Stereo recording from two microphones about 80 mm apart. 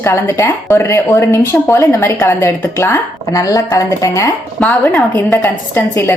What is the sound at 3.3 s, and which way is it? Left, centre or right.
Speech, left.